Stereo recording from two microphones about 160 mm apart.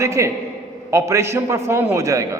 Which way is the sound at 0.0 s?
20° right (ahead or behind).